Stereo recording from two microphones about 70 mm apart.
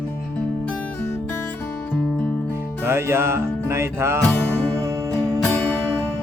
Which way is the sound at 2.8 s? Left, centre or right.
Right.